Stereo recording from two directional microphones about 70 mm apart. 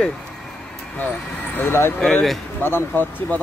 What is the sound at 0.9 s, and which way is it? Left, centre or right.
Speech, left.